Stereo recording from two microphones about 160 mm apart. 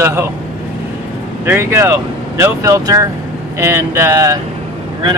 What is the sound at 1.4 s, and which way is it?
Speech, 15° right (ahead or behind).